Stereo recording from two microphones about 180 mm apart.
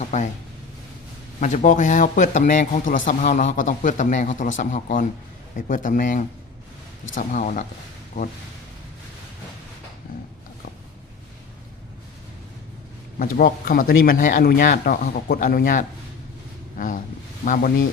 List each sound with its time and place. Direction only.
0.0 s speech: 40° left (ahead or behind)
1.4 s a man's voice: 40° left (ahead or behind)
13.1 s a man's voice: 50° left (ahead or behind)